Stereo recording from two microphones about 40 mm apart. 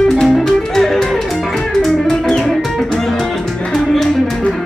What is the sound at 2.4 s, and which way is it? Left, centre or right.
Music, centre.